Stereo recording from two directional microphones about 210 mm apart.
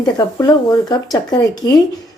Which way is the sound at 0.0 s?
15° left (ahead or behind).